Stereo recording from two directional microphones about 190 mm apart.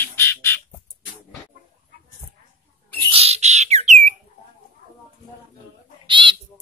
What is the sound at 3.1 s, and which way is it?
Bird, 30° right (ahead or behind).